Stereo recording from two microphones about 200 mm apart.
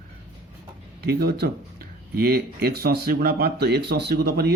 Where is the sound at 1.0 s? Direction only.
50° right (ahead or behind).